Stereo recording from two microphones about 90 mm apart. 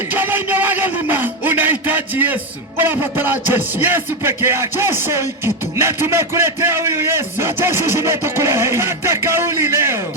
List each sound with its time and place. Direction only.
0.1 s speech: 20° right (ahead or behind)